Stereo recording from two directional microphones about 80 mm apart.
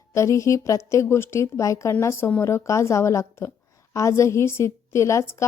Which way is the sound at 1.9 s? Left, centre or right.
Left.